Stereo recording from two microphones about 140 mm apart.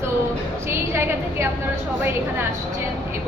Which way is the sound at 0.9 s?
20° right (ahead or behind).